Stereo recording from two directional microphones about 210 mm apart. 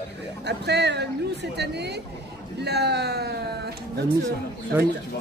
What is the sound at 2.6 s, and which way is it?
Speech, 50° right (ahead or behind).